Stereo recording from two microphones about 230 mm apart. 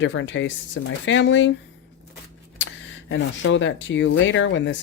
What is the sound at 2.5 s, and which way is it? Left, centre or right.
Speech, left.